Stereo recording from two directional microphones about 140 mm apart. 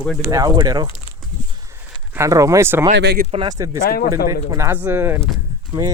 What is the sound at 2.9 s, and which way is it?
Speech, 70° right (ahead or behind).